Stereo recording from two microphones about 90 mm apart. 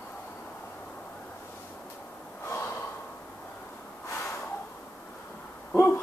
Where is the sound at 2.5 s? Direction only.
30° left (ahead or behind).